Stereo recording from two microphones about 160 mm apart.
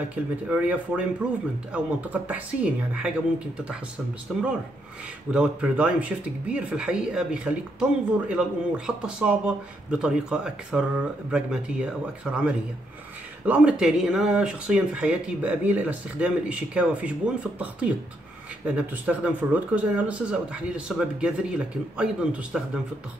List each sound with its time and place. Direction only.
0.5 s speech: 10° right (ahead or behind)
4.3 s speech: 5° right (ahead or behind)